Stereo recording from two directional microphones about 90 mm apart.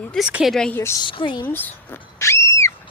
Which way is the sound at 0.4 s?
5° left (ahead or behind).